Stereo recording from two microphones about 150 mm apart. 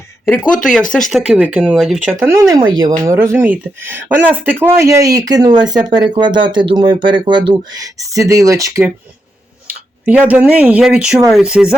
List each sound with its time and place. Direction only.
0.3 s speech: 5° left (ahead or behind)
2.2 s speech: 25° right (ahead or behind)
9.6 s speech: 10° right (ahead or behind)